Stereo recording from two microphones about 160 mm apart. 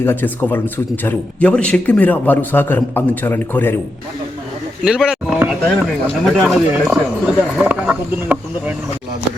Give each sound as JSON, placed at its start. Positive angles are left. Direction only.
{"t": 0.0, "sound": "a man's voice", "side_deg": 15}
{"t": 4.8, "sound": "a sound", "side_deg": -5}
{"t": 5.6, "sound": "speech", "side_deg": 0}